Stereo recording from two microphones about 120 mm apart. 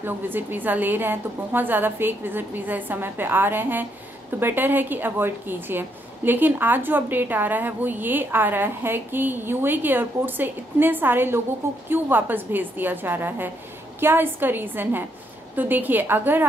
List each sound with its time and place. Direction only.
0.0 s a woman's voice: 15° right (ahead or behind)